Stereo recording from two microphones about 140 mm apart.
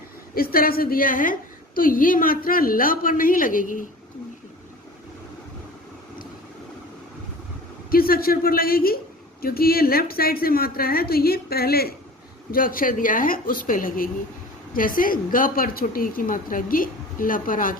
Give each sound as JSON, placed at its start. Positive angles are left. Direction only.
{"t": 0.3, "sound": "a woman's voice", "side_deg": 90}
{"t": 7.9, "sound": "a man's voice", "side_deg": 90}